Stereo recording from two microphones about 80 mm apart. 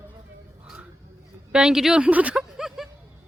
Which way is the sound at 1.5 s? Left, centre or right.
Centre.